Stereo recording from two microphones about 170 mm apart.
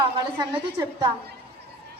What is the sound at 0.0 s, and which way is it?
A woman's voice, 30° right (ahead or behind).